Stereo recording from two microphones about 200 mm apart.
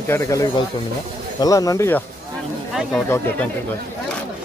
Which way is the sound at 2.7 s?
Centre (ahead or behind).